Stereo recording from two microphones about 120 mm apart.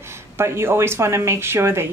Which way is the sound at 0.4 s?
20° right (ahead or behind).